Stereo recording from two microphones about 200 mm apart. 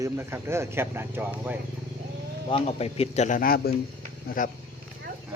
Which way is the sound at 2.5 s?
30° left (ahead or behind).